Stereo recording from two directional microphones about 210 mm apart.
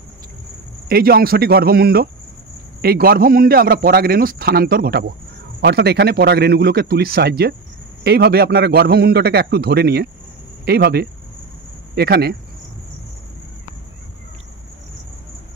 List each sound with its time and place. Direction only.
0.8 s a man's voice: 45° right (ahead or behind)